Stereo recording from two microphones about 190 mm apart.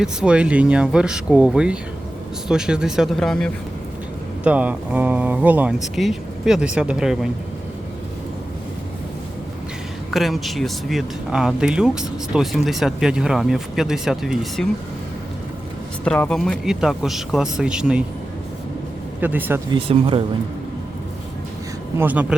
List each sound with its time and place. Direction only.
0.0 s speech: 5° right (ahead or behind)
4.4 s speech: 5° right (ahead or behind)
10.1 s speech: centre (ahead or behind)
16.0 s speech: 5° left (ahead or behind)
19.2 s speech: 10° right (ahead or behind)
19.7 s speech: 30° right (ahead or behind)
21.9 s speech: 10° right (ahead or behind)